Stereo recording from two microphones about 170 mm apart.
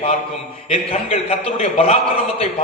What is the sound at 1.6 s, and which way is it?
Speech, 35° left (ahead or behind).